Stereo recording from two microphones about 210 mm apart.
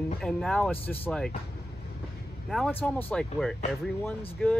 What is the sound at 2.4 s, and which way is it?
A man's voice, centre (ahead or behind).